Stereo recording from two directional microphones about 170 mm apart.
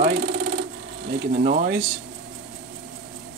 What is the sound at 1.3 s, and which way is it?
Speech, 50° right (ahead or behind).